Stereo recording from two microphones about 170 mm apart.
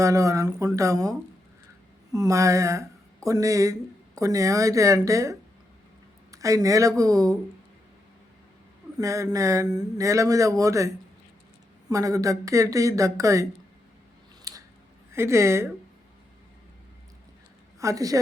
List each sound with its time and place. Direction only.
0.0 s speech: 20° right (ahead or behind)
2.1 s speech: 20° right (ahead or behind)
9.0 s speech: 20° right (ahead or behind)
14.5 s scissors: 20° right (ahead or behind)
15.1 s speech: 15° right (ahead or behind)
17.7 s a woman's voice: 20° right (ahead or behind)